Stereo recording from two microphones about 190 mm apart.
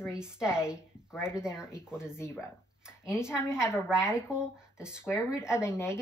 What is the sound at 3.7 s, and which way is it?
Speech, 5° right (ahead or behind).